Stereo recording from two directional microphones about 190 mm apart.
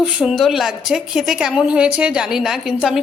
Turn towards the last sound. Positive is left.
turn(degrees=0)  # may be behind; listen again after turning